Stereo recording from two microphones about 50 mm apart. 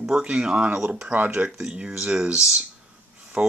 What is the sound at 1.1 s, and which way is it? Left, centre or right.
Speech, right.